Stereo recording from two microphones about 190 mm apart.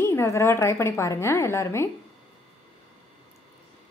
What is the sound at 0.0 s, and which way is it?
A woman's voice, 15° left (ahead or behind).